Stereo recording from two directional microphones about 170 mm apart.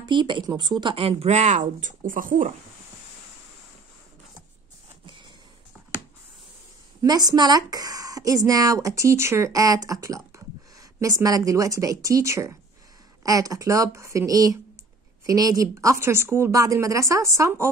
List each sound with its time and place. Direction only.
0.0 s speech: 25° right (ahead or behind); by 2.5 s 50° right (ahead or behind)
7.0 s speech: 20° right (ahead or behind)